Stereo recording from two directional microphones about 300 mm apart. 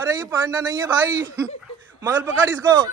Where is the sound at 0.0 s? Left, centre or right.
Centre.